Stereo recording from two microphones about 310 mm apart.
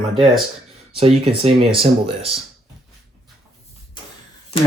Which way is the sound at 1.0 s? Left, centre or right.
Centre.